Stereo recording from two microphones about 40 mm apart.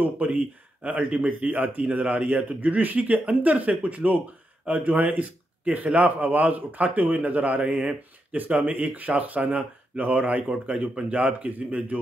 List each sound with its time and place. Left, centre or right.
0.2 s speech: right
1.9 s speech: right